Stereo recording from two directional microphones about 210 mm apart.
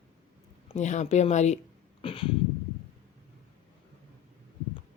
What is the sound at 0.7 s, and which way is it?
Speech, 35° left (ahead or behind).